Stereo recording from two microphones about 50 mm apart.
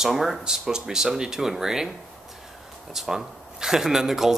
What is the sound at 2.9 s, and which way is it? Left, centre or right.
Speech, centre.